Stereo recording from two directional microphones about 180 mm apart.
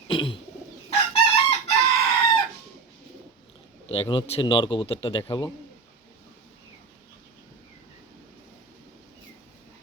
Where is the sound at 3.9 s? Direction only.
30° left (ahead or behind).